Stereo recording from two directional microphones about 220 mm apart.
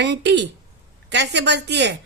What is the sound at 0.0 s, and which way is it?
A woman's voice, 50° right (ahead or behind).